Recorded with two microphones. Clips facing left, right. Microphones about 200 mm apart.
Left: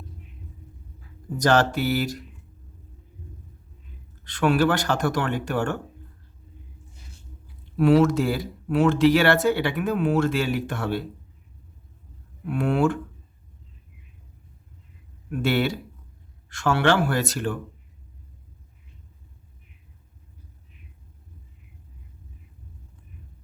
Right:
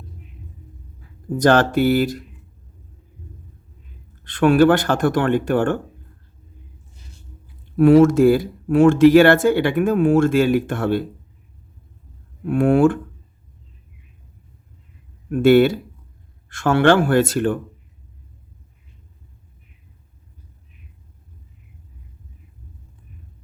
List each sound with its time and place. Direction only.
1.4 s speech: 55° right (ahead or behind)
4.2 s speech: 55° right (ahead or behind)
7.8 s speech: 50° right (ahead or behind)
12.5 s speech: 50° right (ahead or behind)
15.3 s speech: 50° right (ahead or behind)